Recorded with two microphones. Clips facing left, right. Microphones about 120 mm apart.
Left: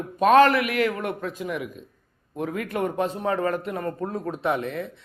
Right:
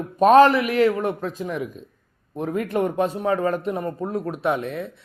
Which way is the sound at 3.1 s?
15° right (ahead or behind).